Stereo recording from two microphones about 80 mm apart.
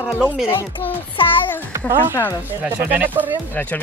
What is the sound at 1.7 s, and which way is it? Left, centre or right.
Speech, right.